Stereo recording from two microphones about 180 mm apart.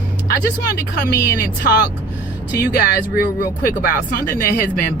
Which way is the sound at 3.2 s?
60° left (ahead or behind).